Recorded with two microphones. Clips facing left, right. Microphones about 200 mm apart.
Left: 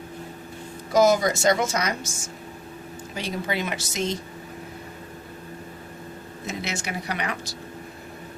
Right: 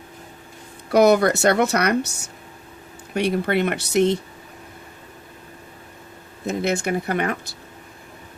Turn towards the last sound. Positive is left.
turn(degrees=-50)  # may be behind; listen again after turning